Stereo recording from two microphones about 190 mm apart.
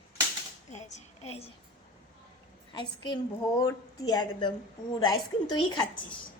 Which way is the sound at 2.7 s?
25° left (ahead or behind).